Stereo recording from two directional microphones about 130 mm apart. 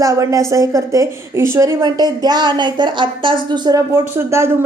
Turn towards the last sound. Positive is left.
turn(degrees=-20)  # may be behind; listen again after turning